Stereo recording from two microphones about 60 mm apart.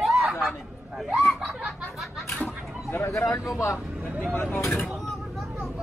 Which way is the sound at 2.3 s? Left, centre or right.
Left.